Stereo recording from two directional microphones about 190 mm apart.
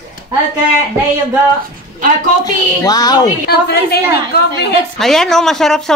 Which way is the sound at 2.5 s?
20° left (ahead or behind).